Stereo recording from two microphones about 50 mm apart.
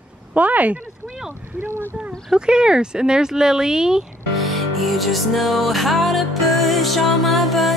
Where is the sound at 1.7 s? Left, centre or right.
Right.